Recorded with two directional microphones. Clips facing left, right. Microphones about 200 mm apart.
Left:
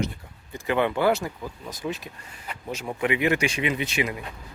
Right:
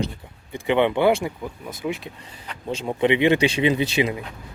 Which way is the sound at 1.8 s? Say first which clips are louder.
Right 3 dB; 10° right (ahead or behind).